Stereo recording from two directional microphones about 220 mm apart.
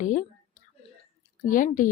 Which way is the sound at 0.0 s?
35° left (ahead or behind).